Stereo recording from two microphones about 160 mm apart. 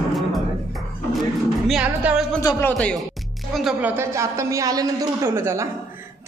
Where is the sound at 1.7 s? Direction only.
5° right (ahead or behind).